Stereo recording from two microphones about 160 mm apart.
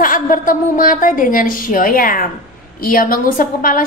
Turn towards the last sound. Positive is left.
turn(degrees=60)  # may be behind; listen again after turning